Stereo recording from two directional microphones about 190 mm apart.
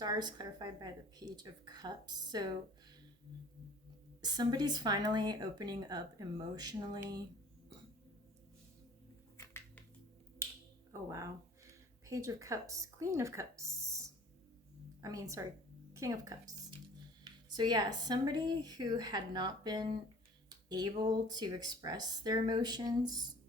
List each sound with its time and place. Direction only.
0.0 s speech: 20° right (ahead or behind)
4.2 s speech: 20° right (ahead or behind)
9.4 s a sound: 15° left (ahead or behind)
12.0 s speech: 15° right (ahead or behind)